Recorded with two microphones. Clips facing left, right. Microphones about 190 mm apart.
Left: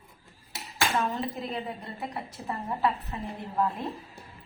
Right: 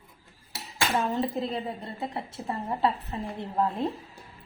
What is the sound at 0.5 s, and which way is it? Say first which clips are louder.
Speech: right 1 dB; 25° right (ahead or behind).